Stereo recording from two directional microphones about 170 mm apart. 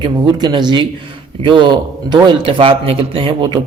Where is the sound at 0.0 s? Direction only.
25° right (ahead or behind).